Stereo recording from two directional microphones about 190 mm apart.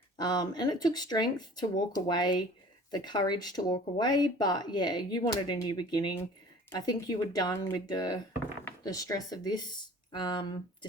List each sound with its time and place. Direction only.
0.2 s speech: 20° left (ahead or behind)